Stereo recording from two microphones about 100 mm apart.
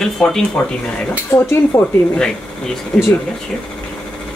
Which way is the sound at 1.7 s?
30° left (ahead or behind).